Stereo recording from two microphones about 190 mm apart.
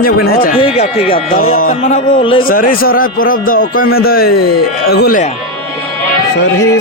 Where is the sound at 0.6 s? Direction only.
30° left (ahead or behind).